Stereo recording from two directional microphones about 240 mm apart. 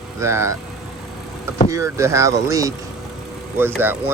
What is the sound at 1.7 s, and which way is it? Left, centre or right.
Speech, centre.